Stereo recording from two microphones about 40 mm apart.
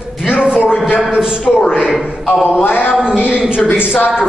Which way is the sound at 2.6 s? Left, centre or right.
Left.